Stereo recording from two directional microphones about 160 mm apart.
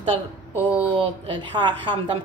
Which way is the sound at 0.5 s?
10° right (ahead or behind).